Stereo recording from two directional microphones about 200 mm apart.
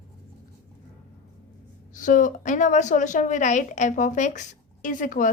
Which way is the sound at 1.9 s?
40° left (ahead or behind).